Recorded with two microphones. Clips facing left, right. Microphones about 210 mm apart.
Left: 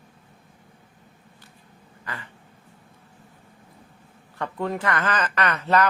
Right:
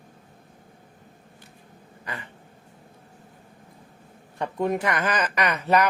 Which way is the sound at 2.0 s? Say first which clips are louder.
Right 1 dB; 20° right (ahead or behind).